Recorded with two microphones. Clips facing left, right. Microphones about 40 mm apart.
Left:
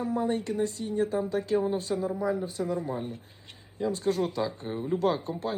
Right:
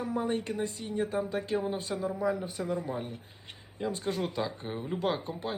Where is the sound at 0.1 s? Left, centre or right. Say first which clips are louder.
Left 1 dB; right.